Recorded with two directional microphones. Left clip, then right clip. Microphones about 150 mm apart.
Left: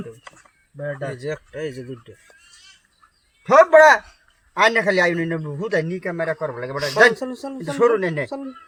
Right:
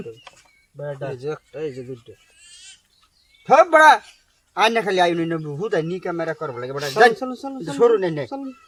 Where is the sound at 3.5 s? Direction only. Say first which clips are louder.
Left 1 dB; 25° right (ahead or behind).